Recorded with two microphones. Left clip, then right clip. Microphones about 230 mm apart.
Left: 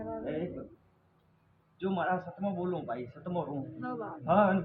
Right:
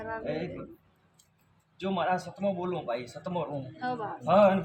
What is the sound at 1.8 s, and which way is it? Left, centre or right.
A man's voice, right.